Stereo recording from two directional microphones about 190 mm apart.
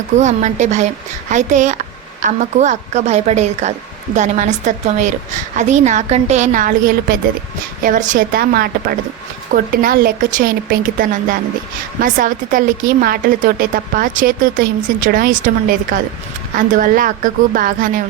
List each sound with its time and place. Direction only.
0.2 s a woman's voice: 40° right (ahead or behind)